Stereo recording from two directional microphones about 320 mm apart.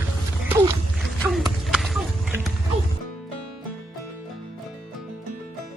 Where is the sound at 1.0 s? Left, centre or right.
Centre.